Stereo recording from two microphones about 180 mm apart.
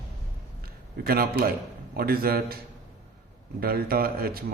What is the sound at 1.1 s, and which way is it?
A man's voice, 55° right (ahead or behind).